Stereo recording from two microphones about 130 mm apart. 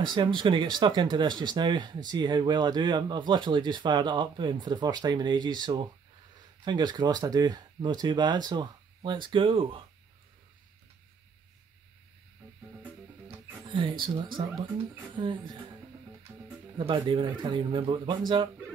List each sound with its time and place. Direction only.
0.0 s speech: 35° right (ahead or behind)
13.7 s speech: 40° right (ahead or behind)
16.3 s music: 20° right (ahead or behind)
16.7 s speech: 40° right (ahead or behind)